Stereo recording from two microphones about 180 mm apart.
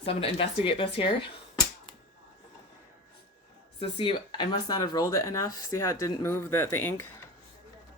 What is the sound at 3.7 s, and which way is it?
Speech, 30° left (ahead or behind).